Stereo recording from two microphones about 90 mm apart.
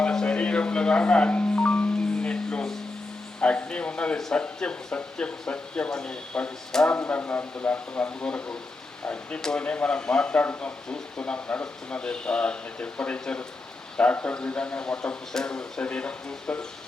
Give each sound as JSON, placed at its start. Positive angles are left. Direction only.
{"t": 0.0, "sound": "music", "side_deg": 10}
{"t": 3.4, "sound": "speech", "side_deg": 15}